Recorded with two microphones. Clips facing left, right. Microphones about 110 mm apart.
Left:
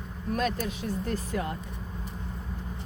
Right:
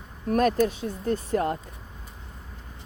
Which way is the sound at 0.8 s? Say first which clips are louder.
Right 3 dB; 30° right (ahead or behind).